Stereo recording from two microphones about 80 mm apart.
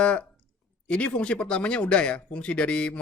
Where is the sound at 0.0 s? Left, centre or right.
Centre.